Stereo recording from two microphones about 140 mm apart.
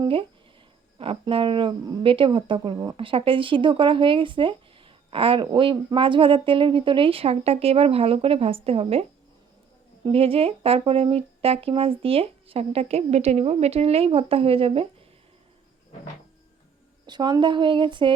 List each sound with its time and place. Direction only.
0.9 s speech: 40° right (ahead or behind)
10.1 s speech: 45° right (ahead or behind)
17.1 s speech: 30° right (ahead or behind)